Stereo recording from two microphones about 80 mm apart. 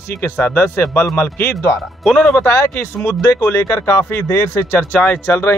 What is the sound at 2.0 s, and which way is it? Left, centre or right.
Speech, centre.